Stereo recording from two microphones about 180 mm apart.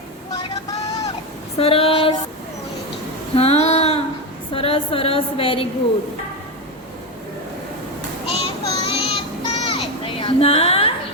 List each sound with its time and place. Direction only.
0.3 s vehicle: 20° left (ahead or behind)
1.5 s female singing: 30° left (ahead or behind)
3.3 s a sound: 35° left (ahead or behind)
4.5 s a woman's voice: 30° left (ahead or behind)
8.3 s child singing: 35° left (ahead or behind)